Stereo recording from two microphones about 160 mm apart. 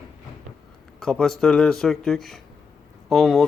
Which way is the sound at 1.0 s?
5° left (ahead or behind).